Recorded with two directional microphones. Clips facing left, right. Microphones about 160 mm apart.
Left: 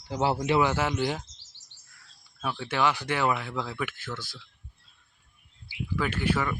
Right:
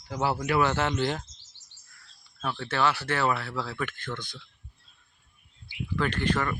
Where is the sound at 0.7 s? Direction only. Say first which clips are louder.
Even; 10° left (ahead or behind).